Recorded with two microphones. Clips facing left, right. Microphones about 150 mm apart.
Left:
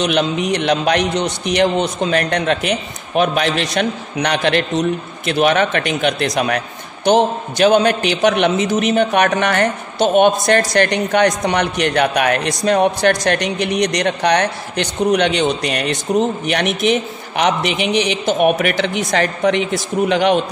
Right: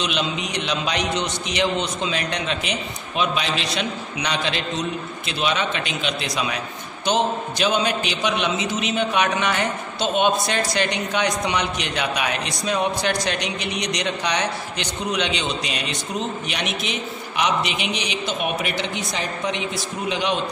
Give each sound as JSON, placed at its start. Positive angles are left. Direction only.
{"t": 0.0, "sound": "a woman's voice", "side_deg": 55}